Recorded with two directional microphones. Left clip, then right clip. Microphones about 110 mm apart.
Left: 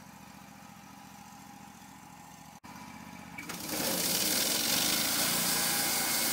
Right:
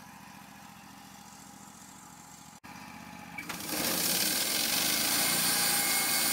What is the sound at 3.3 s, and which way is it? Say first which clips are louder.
Lawn mower: right 1 dB; 25° left (ahead or behind).